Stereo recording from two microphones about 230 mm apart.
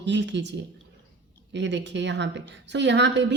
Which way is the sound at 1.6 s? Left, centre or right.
Right.